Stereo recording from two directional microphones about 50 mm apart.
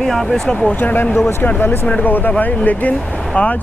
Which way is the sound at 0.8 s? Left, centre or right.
Left.